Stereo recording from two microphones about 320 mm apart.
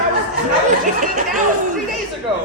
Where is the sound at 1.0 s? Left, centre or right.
Right.